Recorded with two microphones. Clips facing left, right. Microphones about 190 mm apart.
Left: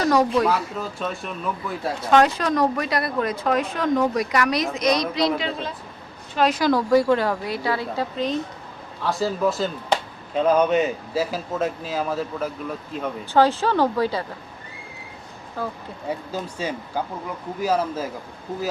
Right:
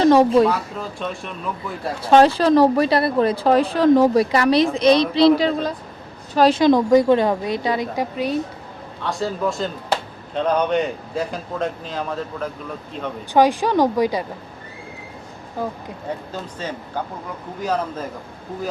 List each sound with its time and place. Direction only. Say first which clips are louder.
0.0 s speech: right 6 dB; 25° right (ahead or behind)
0.4 s speech: right 2 dB; centre (ahead or behind)
2.0 s speech: right 5 dB; 30° right (ahead or behind)
5.4 s a woman's voice: right 8 dB; 40° right (ahead or behind); by 8.4 s 10° right (ahead or behind)
9.0 s speech: left 1 dB; centre (ahead or behind)
13.3 s speech: right 3 dB; 15° right (ahead or behind)
15.6 s speech: right 3 dB; 15° right (ahead or behind)
16.0 s speech: left 1 dB; 10° left (ahead or behind)